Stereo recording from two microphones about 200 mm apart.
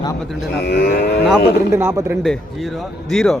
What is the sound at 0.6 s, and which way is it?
Cattle, 50° left (ahead or behind).